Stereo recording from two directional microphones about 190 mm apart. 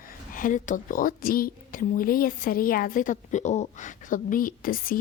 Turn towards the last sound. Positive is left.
turn(degrees=50)  # may be behind; listen again after turning